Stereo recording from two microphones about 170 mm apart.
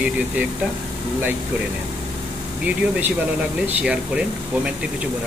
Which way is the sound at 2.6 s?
5° right (ahead or behind).